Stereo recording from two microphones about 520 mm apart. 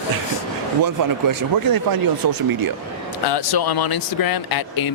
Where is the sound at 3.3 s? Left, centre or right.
Left.